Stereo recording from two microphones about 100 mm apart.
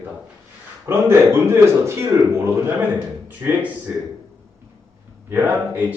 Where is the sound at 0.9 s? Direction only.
25° right (ahead or behind).